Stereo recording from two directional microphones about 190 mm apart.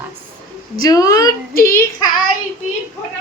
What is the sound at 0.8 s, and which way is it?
A woman's voice, 20° left (ahead or behind).